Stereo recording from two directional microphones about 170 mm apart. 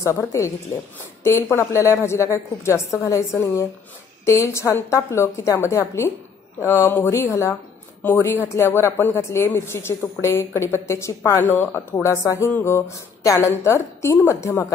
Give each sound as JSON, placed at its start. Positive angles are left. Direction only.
{"t": 0.0, "sound": "speech", "side_deg": 15}